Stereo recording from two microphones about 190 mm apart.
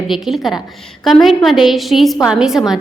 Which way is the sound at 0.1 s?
Centre (ahead or behind).